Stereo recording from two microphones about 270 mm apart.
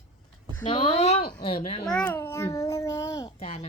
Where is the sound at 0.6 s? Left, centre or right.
Left.